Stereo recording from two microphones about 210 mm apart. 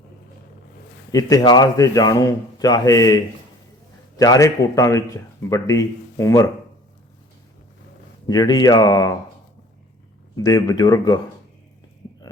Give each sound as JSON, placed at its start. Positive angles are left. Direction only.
{"t": 1.1, "sound": "a man's voice", "side_deg": 20}
{"t": 4.2, "sound": "a man's voice", "side_deg": 15}
{"t": 8.3, "sound": "a man's voice", "side_deg": 20}
{"t": 10.3, "sound": "a man's voice", "side_deg": 15}